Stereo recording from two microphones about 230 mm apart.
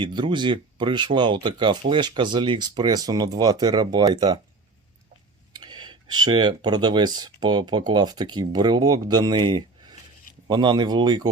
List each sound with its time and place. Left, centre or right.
0.0 s speech: right
5.5 s speech: centre